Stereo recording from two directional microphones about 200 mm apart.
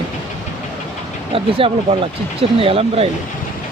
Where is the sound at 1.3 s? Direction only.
30° right (ahead or behind).